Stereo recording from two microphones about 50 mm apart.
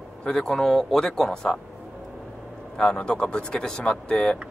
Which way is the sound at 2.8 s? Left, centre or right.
Centre.